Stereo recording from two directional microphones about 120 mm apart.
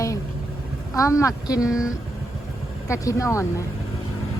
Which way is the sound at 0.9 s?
25° left (ahead or behind).